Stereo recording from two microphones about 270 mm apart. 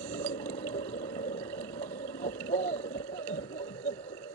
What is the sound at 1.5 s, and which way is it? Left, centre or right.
Water, centre.